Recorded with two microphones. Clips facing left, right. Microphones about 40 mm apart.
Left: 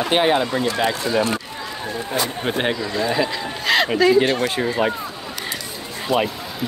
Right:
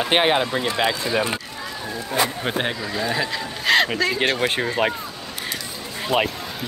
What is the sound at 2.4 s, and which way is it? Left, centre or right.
Speech, centre.